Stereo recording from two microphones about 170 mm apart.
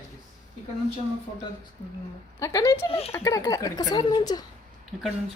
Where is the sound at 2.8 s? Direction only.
35° left (ahead or behind).